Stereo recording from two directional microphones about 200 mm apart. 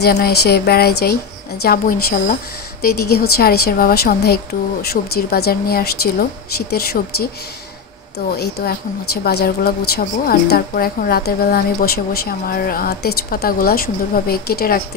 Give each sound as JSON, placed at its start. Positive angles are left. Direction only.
{"t": 0.0, "sound": "a woman's voice", "side_deg": 50}
{"t": 8.3, "sound": "a woman's voice", "side_deg": 50}